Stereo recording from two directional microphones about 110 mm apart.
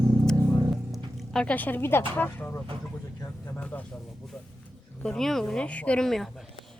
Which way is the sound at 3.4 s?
15° left (ahead or behind).